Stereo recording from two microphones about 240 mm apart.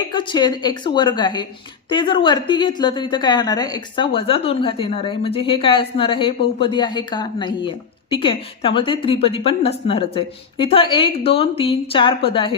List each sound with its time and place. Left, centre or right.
0.1 s a woman's voice: centre